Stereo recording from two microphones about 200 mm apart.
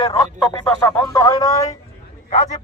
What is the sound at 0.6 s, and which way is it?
A man's voice, 10° left (ahead or behind).